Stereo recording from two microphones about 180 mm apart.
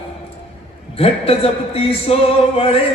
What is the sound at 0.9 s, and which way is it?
A man's voice, 35° left (ahead or behind).